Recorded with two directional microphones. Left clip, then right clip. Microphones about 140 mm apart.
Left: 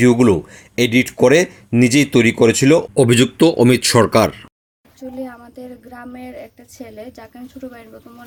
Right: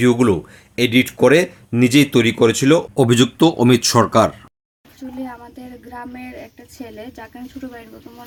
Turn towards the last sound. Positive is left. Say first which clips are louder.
# even
turn(degrees=25)  # may be behind; listen again after turning